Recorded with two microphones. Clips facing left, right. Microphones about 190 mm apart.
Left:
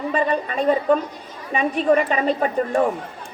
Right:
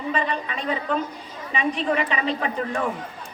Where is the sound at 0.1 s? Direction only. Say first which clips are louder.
Left 4 dB; 45° left (ahead or behind).